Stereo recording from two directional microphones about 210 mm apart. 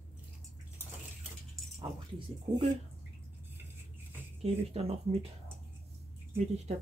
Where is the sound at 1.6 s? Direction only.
Centre (ahead or behind).